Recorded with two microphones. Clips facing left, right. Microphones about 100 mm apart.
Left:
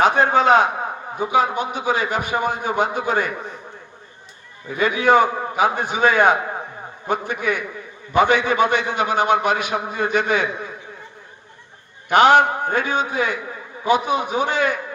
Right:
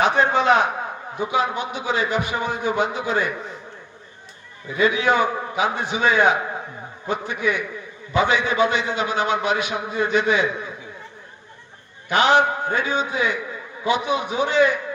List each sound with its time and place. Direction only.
0.0 s a man's voice: 45° left (ahead or behind)
4.8 s a man's voice: 50° left (ahead or behind)
12.0 s a man's voice: 50° left (ahead or behind)